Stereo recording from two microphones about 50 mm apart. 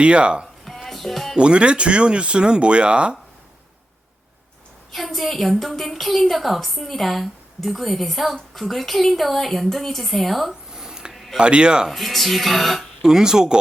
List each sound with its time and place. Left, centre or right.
0.0 s speech: right
0.9 s music: centre
1.4 s speech: right
4.9 s a woman's voice: centre
10.7 s a sound: centre
11.1 s a sound: centre
11.3 s speech: centre
11.9 s a woman's voice: centre
13.0 s speech: centre